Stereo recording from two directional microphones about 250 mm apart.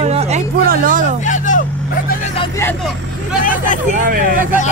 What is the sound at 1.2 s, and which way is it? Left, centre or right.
Vehicle, left.